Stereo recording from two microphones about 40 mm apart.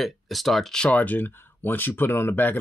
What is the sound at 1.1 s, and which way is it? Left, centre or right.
Speech, left.